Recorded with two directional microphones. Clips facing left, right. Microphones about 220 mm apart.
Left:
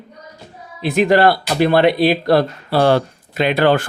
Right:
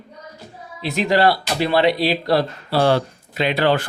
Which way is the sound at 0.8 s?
55° left (ahead or behind).